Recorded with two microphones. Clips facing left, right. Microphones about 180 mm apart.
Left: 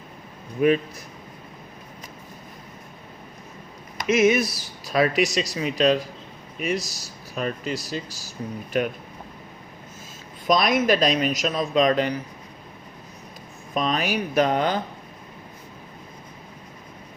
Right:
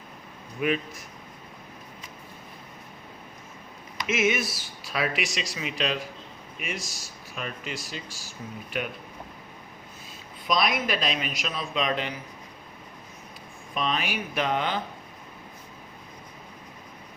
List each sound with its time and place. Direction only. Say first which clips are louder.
0.6 s speech: left 7 dB; 40° left (ahead or behind)
3.9 s speech: left 7 dB; 40° left (ahead or behind)
10.4 s speech: left 6 dB; 45° left (ahead or behind)
13.7 s speech: left 5 dB; 40° left (ahead or behind)